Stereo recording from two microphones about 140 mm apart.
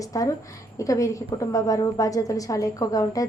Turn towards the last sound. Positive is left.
turn(degrees=25)  # may be behind; listen again after turning